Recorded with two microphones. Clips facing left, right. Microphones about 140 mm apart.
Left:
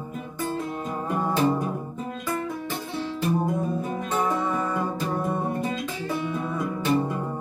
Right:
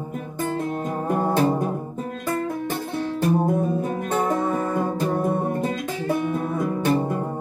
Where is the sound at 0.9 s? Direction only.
50° right (ahead or behind).